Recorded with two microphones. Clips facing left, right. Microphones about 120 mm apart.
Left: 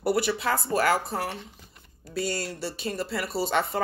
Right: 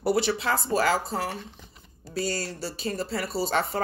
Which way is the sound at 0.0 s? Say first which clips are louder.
Right 1 dB; 30° right (ahead or behind).